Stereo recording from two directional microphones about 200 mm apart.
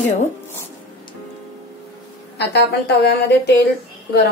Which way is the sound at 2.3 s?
55° left (ahead or behind).